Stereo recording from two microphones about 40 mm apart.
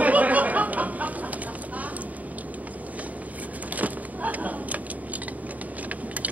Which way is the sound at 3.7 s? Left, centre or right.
Right.